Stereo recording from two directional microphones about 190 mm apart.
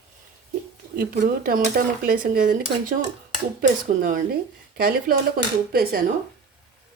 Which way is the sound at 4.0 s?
45° right (ahead or behind).